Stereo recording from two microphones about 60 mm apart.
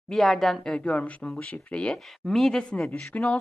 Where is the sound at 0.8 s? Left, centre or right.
Left.